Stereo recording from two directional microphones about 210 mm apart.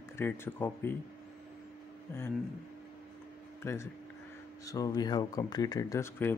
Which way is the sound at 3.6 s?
10° left (ahead or behind).